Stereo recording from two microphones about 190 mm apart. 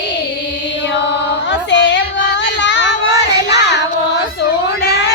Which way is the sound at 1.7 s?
70° left (ahead or behind).